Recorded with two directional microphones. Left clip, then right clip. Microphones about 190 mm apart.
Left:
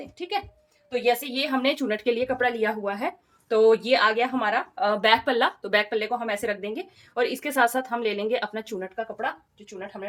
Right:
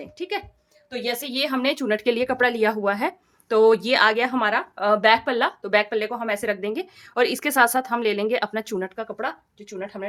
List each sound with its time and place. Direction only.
1.0 s speech: 45° right (ahead or behind)
7.1 s speech: 45° right (ahead or behind)